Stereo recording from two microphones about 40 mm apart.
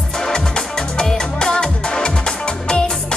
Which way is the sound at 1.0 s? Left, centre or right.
Centre.